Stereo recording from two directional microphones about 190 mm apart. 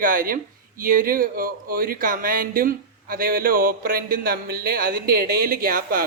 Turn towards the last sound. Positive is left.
turn(degrees=-50)  # may be behind; listen again after turning